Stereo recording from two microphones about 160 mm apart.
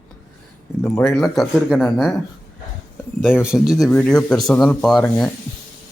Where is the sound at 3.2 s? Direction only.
5° right (ahead or behind).